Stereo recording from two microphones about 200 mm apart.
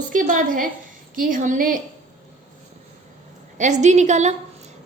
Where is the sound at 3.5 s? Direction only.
35° right (ahead or behind).